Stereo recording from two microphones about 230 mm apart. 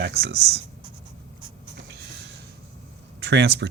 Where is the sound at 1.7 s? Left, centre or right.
Right.